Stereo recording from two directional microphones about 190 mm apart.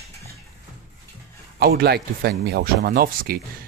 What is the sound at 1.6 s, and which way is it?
Speech, 55° right (ahead or behind).